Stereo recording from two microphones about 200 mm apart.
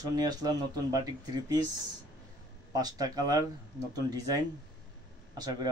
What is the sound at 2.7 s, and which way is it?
Speech, 20° right (ahead or behind).